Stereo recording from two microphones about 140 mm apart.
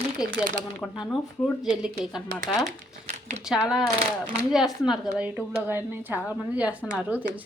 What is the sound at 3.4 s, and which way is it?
A woman's voice, 5° right (ahead or behind).